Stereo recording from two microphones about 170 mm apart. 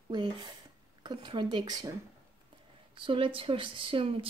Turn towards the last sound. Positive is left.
turn(degrees=-30)  # may be behind; listen again after turning